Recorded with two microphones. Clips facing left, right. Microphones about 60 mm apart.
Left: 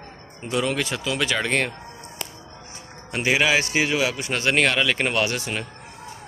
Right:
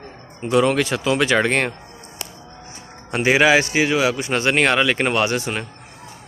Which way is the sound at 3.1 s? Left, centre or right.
Right.